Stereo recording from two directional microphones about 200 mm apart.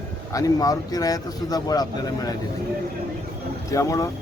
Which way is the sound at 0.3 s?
15° left (ahead or behind).